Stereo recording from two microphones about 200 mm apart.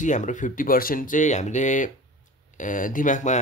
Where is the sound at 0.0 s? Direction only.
40° left (ahead or behind).